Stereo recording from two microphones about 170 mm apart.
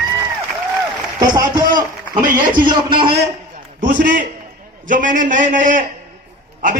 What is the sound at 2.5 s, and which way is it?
Speech, 30° right (ahead or behind).